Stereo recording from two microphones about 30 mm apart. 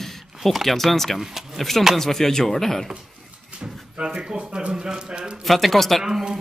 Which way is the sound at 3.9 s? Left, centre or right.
Right.